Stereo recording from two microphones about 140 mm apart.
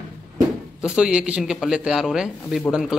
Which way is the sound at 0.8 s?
5° right (ahead or behind).